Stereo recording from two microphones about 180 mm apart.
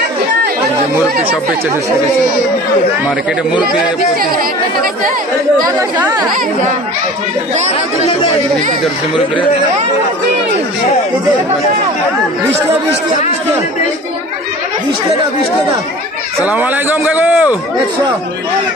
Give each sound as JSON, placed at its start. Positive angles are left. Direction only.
{"t": 7.5, "sound": "speech", "side_deg": -40}
{"t": 16.4, "sound": "a man's voice", "side_deg": -10}